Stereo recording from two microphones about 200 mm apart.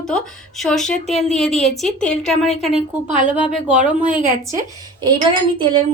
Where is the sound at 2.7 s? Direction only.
30° left (ahead or behind).